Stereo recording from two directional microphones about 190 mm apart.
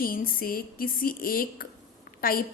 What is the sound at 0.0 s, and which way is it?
A woman's voice, 50° left (ahead or behind).